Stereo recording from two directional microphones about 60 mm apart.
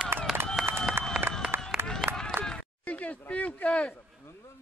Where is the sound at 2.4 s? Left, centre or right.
Centre.